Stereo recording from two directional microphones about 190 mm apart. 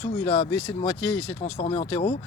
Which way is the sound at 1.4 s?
35° left (ahead or behind).